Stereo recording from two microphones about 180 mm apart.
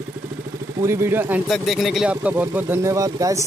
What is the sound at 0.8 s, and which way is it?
Speech, 15° right (ahead or behind).